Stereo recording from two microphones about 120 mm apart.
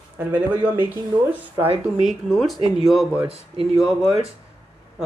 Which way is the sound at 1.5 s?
55° right (ahead or behind).